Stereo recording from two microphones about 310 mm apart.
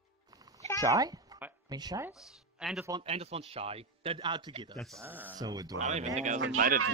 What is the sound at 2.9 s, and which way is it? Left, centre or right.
A man's voice, centre.